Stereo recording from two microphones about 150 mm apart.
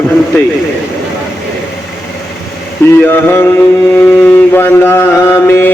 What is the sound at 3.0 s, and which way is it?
Speech, 15° left (ahead or behind).